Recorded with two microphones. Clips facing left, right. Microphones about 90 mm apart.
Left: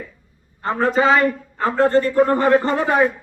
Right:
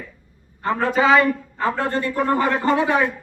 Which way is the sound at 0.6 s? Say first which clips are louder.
Left 1 dB; 30° left (ahead or behind).